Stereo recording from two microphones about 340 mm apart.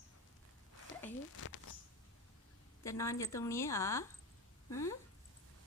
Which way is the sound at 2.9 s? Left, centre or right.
Centre.